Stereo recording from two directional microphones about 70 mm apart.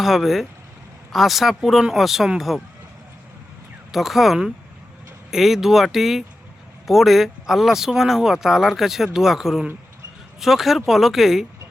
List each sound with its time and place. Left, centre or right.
0.0 s speech: centre
3.9 s speech: centre